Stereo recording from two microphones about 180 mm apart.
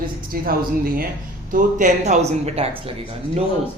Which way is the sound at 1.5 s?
45° right (ahead or behind).